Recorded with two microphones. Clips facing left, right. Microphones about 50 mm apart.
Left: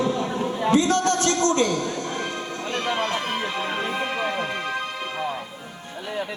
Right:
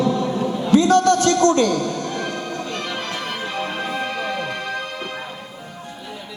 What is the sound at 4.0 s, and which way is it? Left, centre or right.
Music, left.